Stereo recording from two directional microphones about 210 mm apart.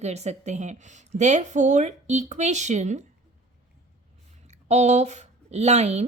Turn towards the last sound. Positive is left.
turn(degrees=-30)  # may be behind; listen again after turning